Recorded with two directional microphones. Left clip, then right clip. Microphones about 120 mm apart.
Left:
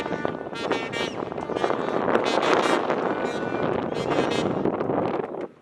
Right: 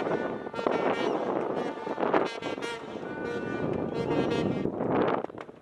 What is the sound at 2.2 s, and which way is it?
Wind noise, 20° left (ahead or behind).